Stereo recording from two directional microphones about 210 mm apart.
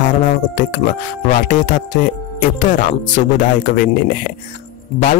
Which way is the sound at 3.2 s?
35° left (ahead or behind).